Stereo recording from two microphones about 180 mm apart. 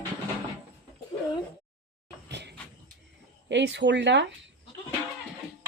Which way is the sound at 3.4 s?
75° right (ahead or behind).